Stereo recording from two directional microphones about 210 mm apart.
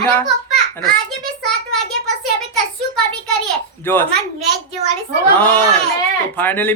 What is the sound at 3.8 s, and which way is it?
Speech, 10° left (ahead or behind).